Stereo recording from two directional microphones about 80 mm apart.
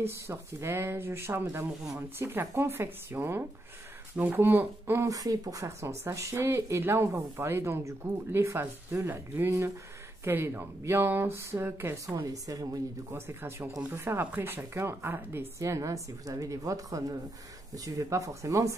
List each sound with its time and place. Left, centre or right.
0.0 s speech: right
5.0 s speech: right
12.3 s a woman's voice: right
13.1 s speech: right
15.6 s a woman's voice: right